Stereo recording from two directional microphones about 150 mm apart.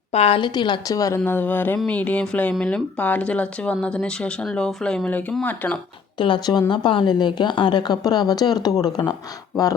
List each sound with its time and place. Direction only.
0.1 s a woman's voice: 45° left (ahead or behind); by 5.8 s 10° left (ahead or behind)
6.1 s a woman's voice: 30° left (ahead or behind)